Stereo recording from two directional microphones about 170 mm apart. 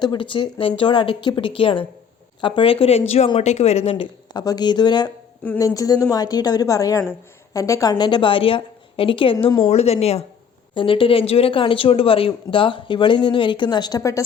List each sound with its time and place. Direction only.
0.0 s speech: 30° left (ahead or behind)